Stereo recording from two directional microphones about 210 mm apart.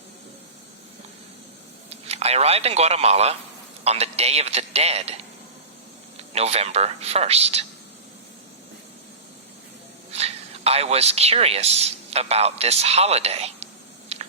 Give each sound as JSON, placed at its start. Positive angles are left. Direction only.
{"t": 1.9, "sound": "a man's voice", "side_deg": -30}
{"t": 10.1, "sound": "a man's voice", "side_deg": -30}
{"t": 14.1, "sound": "a sound", "side_deg": -30}